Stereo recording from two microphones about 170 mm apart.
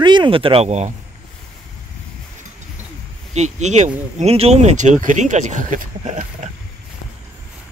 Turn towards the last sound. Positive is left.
turn(degrees=-45)  # may be behind; listen again after turning